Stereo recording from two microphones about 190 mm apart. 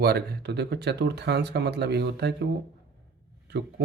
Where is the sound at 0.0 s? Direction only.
60° right (ahead or behind).